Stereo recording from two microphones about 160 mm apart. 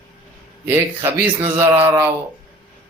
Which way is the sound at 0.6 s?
15° right (ahead or behind).